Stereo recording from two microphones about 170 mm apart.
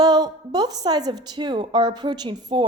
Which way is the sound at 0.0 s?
25° right (ahead or behind).